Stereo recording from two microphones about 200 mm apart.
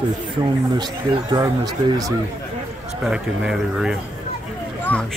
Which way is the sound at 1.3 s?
15° right (ahead or behind).